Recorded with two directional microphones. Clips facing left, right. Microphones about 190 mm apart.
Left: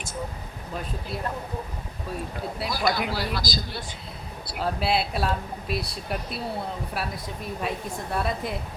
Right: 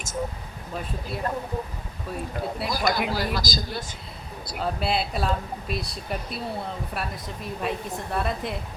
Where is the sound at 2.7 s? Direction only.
45° right (ahead or behind).